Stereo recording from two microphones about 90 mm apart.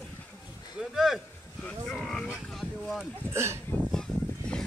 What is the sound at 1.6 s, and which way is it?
Livestock, 5° left (ahead or behind).